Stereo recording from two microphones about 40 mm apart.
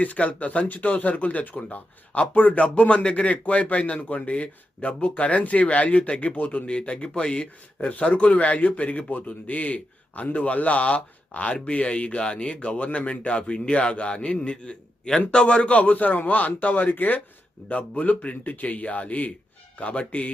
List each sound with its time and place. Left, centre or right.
0.0 s a man's voice: left
7.8 s a man's voice: left
17.7 s a man's voice: left